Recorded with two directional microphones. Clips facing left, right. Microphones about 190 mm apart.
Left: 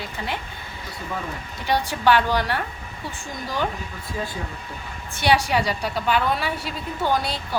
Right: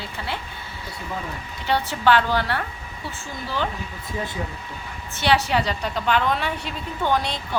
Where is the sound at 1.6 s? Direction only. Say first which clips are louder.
Even; 15° left (ahead or behind).